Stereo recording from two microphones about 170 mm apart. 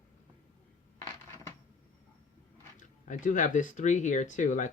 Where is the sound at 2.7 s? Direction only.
50° left (ahead or behind).